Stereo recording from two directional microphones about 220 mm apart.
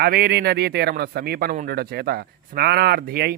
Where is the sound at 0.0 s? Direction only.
45° right (ahead or behind).